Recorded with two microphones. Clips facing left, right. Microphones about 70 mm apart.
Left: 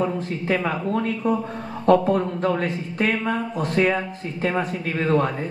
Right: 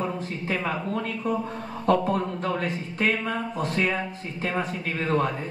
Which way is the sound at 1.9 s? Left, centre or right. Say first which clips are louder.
Left 5 dB; left.